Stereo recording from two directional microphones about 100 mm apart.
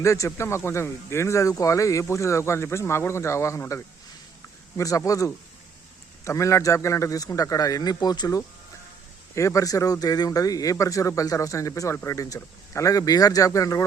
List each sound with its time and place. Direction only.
0.0 s speech: 30° left (ahead or behind)
9.3 s speech: 30° left (ahead or behind)